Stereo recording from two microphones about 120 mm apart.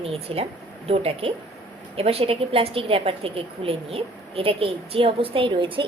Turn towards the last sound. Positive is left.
turn(degrees=-45)  # may be behind; listen again after turning